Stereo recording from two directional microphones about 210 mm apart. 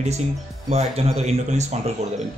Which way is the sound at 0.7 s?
30° right (ahead or behind).